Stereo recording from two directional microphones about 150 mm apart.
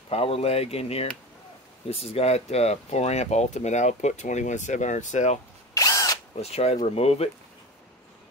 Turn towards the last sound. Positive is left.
turn(degrees=45)  # may be behind; listen again after turning